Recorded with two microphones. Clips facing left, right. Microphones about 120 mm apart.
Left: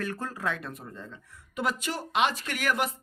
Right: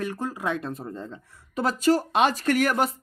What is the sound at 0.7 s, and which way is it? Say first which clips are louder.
Speech: right 7 dB; 35° right (ahead or behind).